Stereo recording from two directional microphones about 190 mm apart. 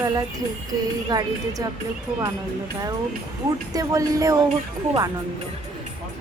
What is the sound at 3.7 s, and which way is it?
Speech, 20° right (ahead or behind).